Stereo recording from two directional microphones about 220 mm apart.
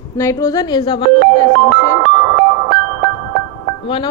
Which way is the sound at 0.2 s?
15° left (ahead or behind).